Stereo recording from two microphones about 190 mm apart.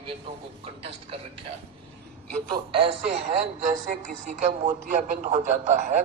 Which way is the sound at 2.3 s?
30° right (ahead or behind).